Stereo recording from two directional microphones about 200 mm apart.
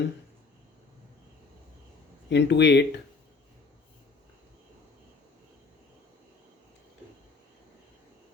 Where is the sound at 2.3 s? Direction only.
60° left (ahead or behind).